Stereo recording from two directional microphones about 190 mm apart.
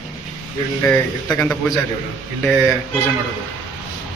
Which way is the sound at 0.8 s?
5° left (ahead or behind).